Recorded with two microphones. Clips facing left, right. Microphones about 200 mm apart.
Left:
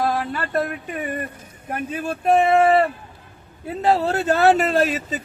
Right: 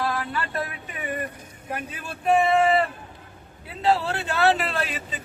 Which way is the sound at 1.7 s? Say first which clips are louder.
Left 8 dB; 45° left (ahead or behind).